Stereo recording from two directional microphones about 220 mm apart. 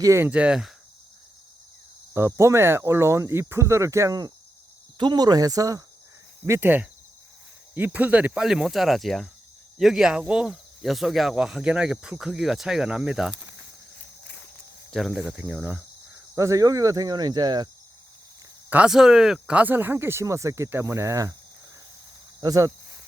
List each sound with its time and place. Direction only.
0.0 s speech: 10° right (ahead or behind)
2.1 s speech: 10° right (ahead or behind)
14.9 s speech: centre (ahead or behind); by 17.7 s 20° right (ahead or behind)
18.7 s speech: 5° right (ahead or behind)
22.4 s speech: 15° right (ahead or behind)